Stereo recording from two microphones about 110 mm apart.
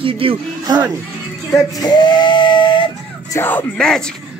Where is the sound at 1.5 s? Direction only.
35° left (ahead or behind).